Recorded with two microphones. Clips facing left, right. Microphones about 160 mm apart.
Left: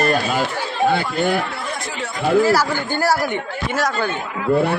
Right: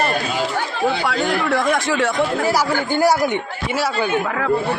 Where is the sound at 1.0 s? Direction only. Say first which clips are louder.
Right 1 dB; 90° right.